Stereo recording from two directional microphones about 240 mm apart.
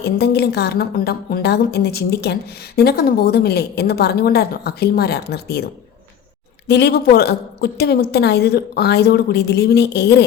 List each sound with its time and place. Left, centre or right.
0.0 s a woman's voice: left
6.7 s a woman's voice: left